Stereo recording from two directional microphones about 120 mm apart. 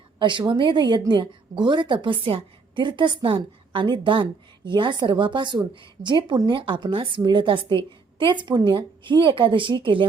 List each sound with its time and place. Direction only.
0.2 s a woman's voice: 40° right (ahead or behind)